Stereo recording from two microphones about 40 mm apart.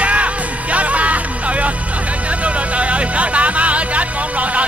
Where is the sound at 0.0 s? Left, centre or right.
Right.